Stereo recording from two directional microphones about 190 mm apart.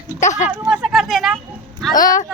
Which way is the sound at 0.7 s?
5° right (ahead or behind).